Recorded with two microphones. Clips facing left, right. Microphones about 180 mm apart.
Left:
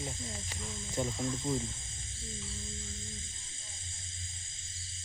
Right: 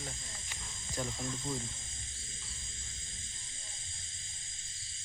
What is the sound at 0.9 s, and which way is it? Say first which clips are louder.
Speech: left 4 dB; 20° left (ahead or behind).